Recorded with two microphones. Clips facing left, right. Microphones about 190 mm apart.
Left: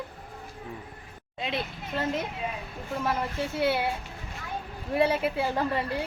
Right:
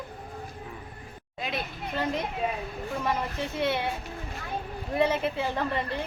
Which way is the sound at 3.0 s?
5° left (ahead or behind).